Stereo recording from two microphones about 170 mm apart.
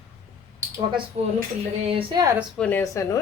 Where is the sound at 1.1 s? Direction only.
35° right (ahead or behind).